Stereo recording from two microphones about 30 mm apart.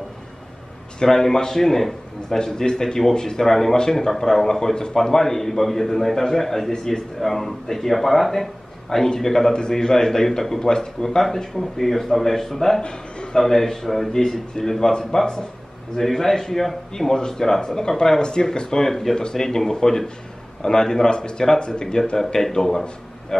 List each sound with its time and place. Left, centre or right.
1.0 s a man's voice: centre
2.2 s a man's voice: left
4.9 s a man's voice: centre
7.2 s a man's voice: centre
9.5 s a man's voice: left
11.8 s a man's voice: centre
14.1 s a man's voice: centre
22.1 s a man's voice: centre